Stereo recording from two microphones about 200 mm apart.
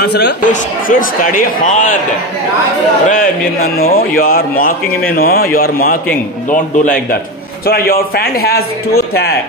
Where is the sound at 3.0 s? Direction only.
45° left (ahead or behind).